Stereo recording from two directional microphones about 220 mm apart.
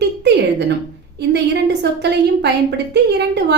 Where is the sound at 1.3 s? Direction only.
50° right (ahead or behind).